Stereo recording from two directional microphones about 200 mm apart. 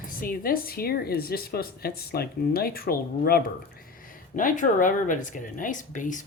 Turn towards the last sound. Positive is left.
turn(degrees=40)  # may be behind; listen again after turning